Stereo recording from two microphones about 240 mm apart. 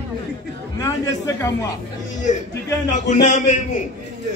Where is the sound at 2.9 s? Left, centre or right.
Left.